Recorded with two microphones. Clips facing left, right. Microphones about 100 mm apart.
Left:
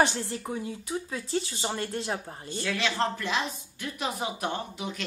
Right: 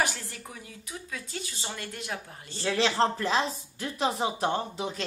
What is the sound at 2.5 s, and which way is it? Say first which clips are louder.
Speech: right 3 dB; 30° right (ahead or behind).